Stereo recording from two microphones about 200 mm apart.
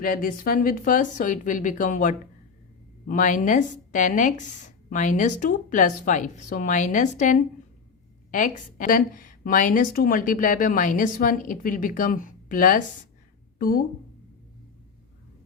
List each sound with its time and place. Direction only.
0.0 s a woman's voice: 45° left (ahead or behind)